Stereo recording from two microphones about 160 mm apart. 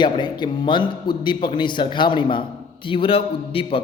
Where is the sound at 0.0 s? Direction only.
30° left (ahead or behind).